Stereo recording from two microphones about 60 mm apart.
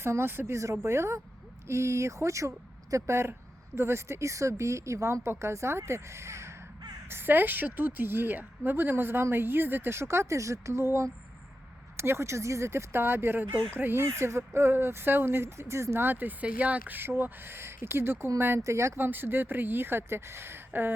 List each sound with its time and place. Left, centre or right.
0.0 s speech: right
0.5 s speech: right
7.1 s a woman's voice: right
14.0 s speech: right
16.0 s a woman's voice: right
18.6 s speech: right
18.9 s a woman's voice: right